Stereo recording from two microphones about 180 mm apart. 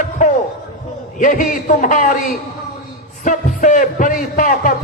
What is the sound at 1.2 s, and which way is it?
Speech, 50° left (ahead or behind).